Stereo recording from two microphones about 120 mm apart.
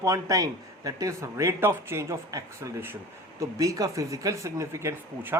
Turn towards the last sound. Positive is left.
turn(degrees=-20)  # may be behind; listen again after turning